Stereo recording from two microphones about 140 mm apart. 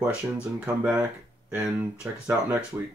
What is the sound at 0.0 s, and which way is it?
Speech, 10° right (ahead or behind).